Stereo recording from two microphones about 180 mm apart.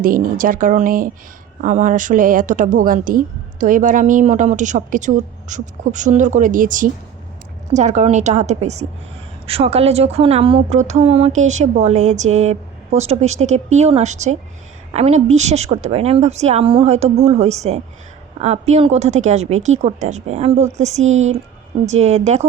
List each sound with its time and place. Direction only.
0.0 s a woman's voice: 50° right (ahead or behind)
21.0 s speech: 90° right
21.8 s speech: 35° right (ahead or behind)